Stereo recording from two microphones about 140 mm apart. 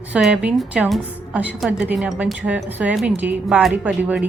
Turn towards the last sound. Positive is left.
turn(degrees=-10)  # may be behind; listen again after turning